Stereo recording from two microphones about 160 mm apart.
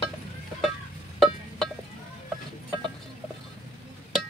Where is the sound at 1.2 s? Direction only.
5° left (ahead or behind).